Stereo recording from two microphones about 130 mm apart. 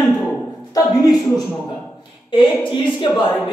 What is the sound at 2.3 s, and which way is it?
Speech, 40° left (ahead or behind).